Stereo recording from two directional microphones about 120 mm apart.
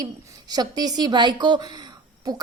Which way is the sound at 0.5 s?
35° right (ahead or behind).